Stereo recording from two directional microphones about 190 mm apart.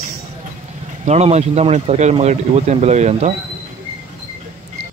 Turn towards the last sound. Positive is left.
turn(degrees=-35)  # may be behind; listen again after turning